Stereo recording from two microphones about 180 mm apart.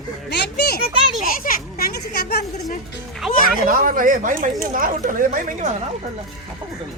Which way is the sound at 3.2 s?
Centre (ahead or behind).